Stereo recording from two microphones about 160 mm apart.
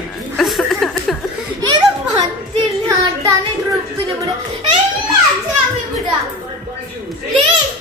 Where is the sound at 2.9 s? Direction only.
20° right (ahead or behind).